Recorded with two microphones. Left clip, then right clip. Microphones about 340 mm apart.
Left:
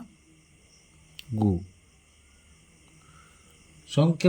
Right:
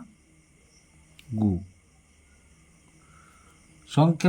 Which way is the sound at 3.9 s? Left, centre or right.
Centre.